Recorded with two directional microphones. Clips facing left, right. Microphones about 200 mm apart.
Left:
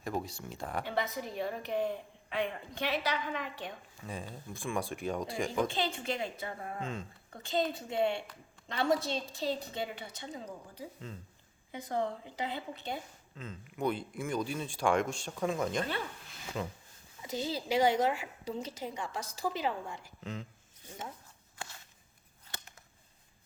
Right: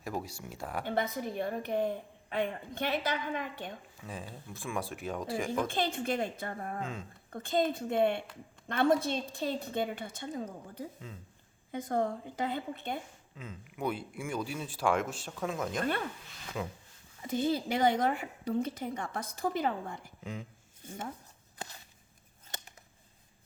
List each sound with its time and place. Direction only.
0.0 s speech: 5° right (ahead or behind)
0.9 s a woman's voice: 50° right (ahead or behind)
4.0 s speech: centre (ahead or behind)
5.6 s a woman's voice: 50° right (ahead or behind)
13.3 s speech: 10° right (ahead or behind)
17.2 s a woman's voice: 55° right (ahead or behind)
20.2 s speech: 10° right (ahead or behind)